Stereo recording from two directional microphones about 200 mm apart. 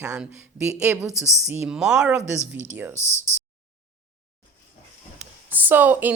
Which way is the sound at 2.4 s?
35° right (ahead or behind).